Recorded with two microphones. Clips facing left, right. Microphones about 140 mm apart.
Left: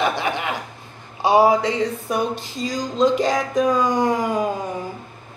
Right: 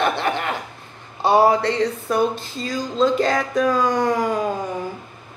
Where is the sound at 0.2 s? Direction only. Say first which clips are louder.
Right 1 dB; 10° left (ahead or behind).